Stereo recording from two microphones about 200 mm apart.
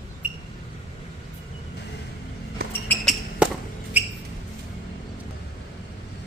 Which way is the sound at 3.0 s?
5° right (ahead or behind).